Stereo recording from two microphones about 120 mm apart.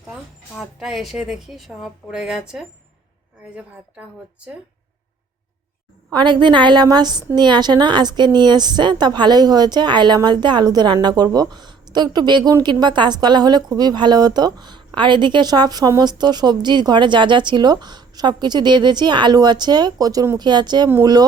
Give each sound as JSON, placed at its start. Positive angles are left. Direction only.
{"t": 0.6, "sound": "a woman's voice", "side_deg": -5}
{"t": 6.1, "sound": "a woman's voice", "side_deg": -40}